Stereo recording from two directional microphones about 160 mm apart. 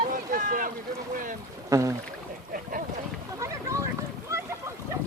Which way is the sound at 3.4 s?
20° right (ahead or behind).